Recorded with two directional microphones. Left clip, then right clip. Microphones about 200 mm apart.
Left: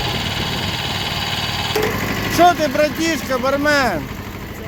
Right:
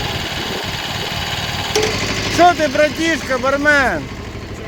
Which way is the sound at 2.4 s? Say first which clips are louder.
Right 1 dB; centre (ahead or behind).